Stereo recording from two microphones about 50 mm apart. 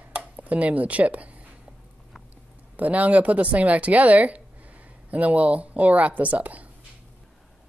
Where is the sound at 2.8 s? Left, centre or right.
Right.